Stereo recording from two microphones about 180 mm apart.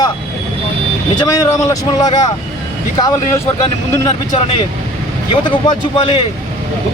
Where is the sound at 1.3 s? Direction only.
20° left (ahead or behind).